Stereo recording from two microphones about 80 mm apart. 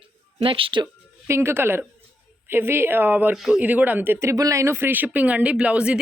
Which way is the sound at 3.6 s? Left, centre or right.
Right.